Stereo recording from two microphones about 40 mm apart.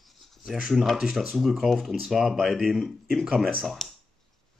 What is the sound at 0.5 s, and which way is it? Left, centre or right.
Speech, centre.